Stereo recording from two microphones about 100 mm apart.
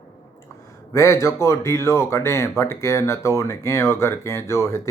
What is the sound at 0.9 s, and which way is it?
Speech, 30° left (ahead or behind).